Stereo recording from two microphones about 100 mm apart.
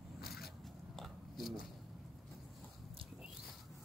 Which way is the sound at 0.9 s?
Centre (ahead or behind).